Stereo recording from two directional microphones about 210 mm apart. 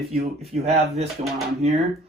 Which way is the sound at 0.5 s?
35° right (ahead or behind).